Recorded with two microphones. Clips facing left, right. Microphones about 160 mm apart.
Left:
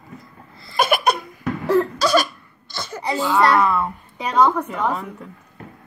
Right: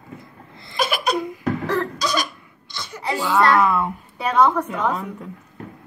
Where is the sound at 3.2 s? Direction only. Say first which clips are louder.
Even; 15° left (ahead or behind).